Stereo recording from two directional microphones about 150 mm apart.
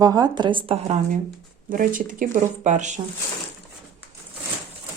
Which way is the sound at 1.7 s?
65° right (ahead or behind).